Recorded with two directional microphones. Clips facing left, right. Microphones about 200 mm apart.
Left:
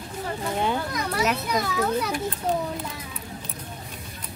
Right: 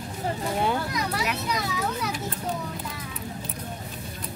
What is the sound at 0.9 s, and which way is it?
Children playing, 50° left (ahead or behind).